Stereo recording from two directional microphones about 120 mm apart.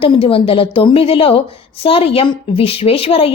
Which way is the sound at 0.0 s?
50° left (ahead or behind).